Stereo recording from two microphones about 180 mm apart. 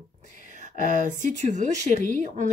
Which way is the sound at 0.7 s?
45° right (ahead or behind).